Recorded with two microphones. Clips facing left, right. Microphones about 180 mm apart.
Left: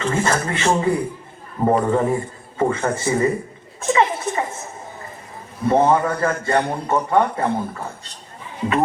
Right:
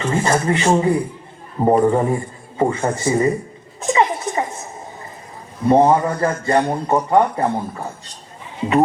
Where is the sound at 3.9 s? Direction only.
20° right (ahead or behind).